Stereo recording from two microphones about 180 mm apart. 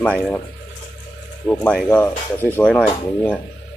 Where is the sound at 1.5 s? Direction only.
10° left (ahead or behind).